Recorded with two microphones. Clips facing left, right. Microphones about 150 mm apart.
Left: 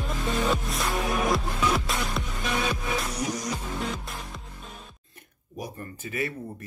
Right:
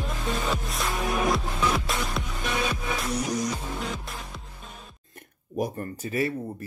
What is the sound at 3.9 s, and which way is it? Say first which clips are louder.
Music: even; centre (ahead or behind).